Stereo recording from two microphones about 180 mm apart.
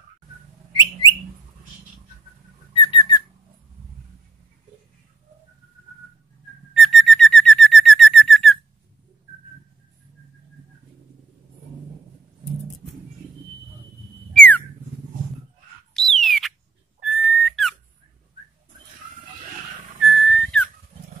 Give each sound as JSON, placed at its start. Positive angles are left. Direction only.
{"t": 2.7, "sound": "whistling", "side_deg": 25}
{"t": 6.8, "sound": "bird", "side_deg": 0}
{"t": 14.3, "sound": "a sound", "side_deg": 5}
{"t": 15.9, "sound": "a sound", "side_deg": 0}
{"t": 17.0, "sound": "whistle", "side_deg": 0}
{"t": 20.1, "sound": "whistle", "side_deg": 0}